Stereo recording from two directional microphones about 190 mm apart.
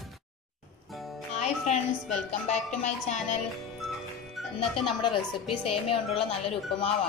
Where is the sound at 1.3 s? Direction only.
35° left (ahead or behind).